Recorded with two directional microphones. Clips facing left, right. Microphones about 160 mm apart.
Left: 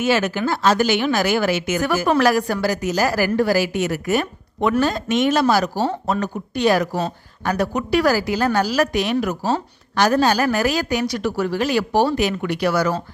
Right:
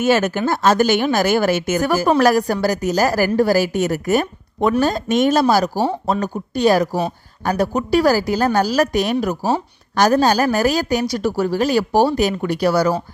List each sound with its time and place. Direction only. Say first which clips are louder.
0.0 s a woman's voice: right 3 dB; 45° right (ahead or behind)
5.7 s speech: right 2 dB; 15° right (ahead or behind)
6.1 s a woman's voice: right 2 dB; 35° right (ahead or behind)